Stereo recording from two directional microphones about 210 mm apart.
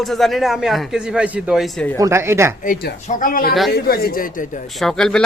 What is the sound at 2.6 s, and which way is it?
Speech, 40° left (ahead or behind).